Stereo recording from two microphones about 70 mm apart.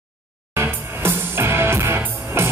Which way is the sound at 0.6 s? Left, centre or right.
Right.